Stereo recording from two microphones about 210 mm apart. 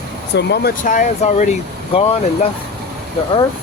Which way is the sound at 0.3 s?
50° left (ahead or behind).